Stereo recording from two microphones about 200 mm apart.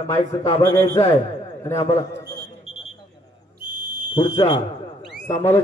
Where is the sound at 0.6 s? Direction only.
15° left (ahead or behind).